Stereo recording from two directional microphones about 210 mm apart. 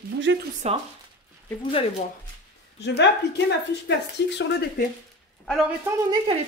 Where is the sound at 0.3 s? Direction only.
60° right (ahead or behind).